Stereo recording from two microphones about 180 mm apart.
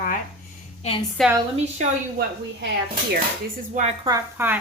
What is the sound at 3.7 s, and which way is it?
Speech, 45° right (ahead or behind).